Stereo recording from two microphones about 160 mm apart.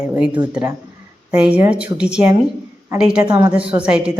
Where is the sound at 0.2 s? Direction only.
10° right (ahead or behind).